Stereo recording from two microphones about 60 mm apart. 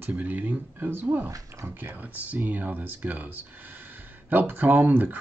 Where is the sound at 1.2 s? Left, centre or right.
Right.